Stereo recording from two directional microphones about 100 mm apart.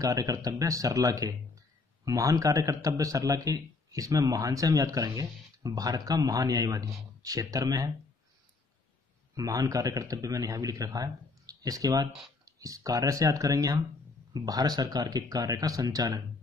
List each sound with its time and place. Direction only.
0.0 s a man's voice: 35° right (ahead or behind)
9.3 s a man's voice: 35° right (ahead or behind)